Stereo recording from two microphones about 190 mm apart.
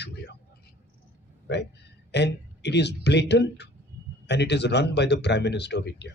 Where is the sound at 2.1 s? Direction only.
65° left (ahead or behind).